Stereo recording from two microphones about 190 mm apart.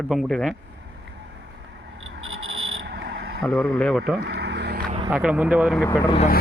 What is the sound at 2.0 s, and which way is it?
Cricket, 90° right.